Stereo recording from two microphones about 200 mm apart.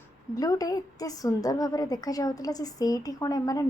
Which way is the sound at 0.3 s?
20° left (ahead or behind).